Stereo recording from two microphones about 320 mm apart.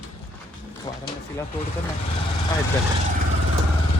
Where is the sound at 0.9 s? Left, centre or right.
Centre.